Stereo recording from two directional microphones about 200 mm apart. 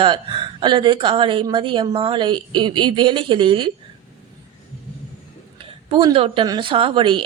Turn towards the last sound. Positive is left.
turn(degrees=-25)  # may be behind; listen again after turning